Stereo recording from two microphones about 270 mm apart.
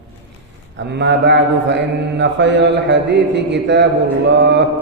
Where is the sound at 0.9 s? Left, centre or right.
Right.